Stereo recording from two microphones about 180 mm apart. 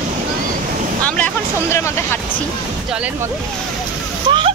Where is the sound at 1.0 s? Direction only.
10° left (ahead or behind).